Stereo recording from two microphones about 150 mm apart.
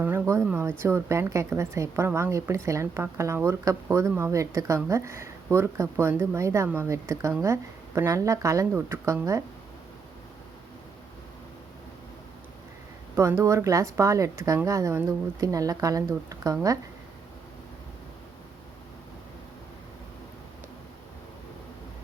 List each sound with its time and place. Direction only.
0.0 s a woman's voice: 10° right (ahead or behind)
13.1 s a woman's voice: 20° right (ahead or behind)